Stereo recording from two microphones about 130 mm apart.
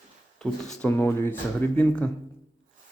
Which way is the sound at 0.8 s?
20° left (ahead or behind).